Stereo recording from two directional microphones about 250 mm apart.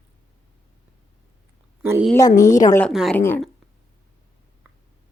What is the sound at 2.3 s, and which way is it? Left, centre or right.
Speech, left.